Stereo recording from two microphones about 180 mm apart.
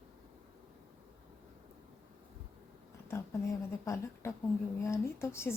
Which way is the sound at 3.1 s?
15° left (ahead or behind).